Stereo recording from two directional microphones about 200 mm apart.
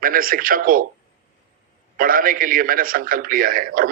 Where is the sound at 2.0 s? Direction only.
45° right (ahead or behind).